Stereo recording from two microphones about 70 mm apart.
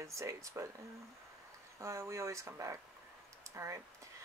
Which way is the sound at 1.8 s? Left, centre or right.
Right.